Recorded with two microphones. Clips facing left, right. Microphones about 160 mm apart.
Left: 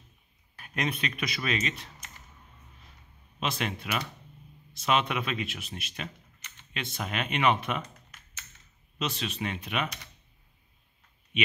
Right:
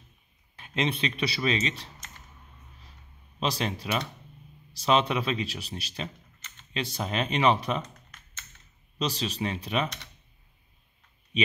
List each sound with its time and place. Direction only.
0.6 s speech: 25° right (ahead or behind)
3.3 s speech: 35° right (ahead or behind)
8.9 s speech: 35° right (ahead or behind)